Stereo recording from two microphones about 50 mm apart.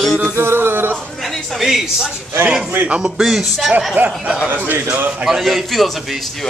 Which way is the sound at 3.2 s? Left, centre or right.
Centre.